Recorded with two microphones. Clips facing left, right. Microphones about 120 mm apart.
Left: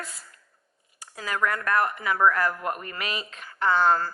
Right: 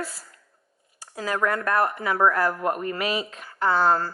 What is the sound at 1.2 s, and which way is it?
A woman's voice, 10° right (ahead or behind).